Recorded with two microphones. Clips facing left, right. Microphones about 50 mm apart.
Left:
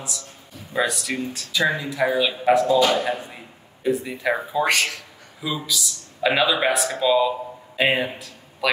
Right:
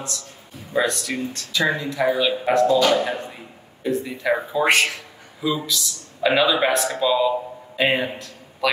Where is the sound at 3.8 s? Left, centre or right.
Centre.